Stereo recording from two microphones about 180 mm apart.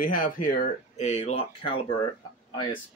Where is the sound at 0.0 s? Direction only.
50° left (ahead or behind).